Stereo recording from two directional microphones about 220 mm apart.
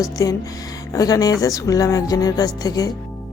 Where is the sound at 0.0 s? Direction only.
15° left (ahead or behind).